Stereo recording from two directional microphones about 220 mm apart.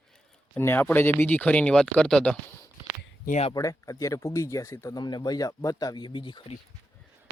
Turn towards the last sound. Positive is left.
turn(degrees=20)  # may be behind; listen again after turning